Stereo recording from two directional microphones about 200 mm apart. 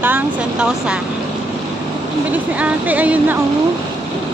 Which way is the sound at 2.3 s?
5° right (ahead or behind).